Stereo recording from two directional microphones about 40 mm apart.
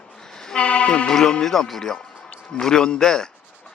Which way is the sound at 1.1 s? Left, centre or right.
Centre.